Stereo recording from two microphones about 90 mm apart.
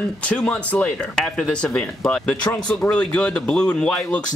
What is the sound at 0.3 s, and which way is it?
Speech, 10° left (ahead or behind).